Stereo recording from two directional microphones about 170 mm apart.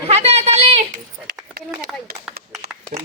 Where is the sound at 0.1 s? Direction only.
40° right (ahead or behind).